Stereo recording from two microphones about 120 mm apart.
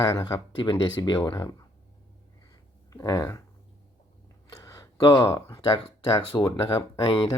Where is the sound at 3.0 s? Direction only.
25° left (ahead or behind).